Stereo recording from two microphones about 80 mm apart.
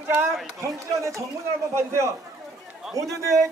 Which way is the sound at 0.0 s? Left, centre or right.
Right.